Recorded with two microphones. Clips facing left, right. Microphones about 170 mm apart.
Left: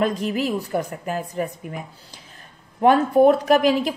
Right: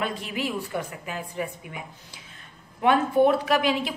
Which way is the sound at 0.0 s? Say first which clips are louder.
Left 7 dB; 40° left (ahead or behind).